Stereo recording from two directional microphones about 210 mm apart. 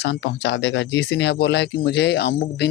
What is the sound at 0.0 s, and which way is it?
A man's voice, 55° left (ahead or behind).